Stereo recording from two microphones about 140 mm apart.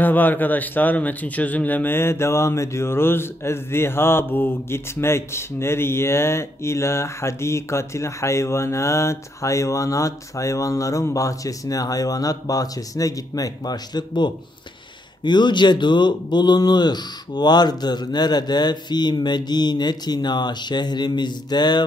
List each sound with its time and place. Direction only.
0.0 s speech: 15° left (ahead or behind); by 21.8 s 30° left (ahead or behind)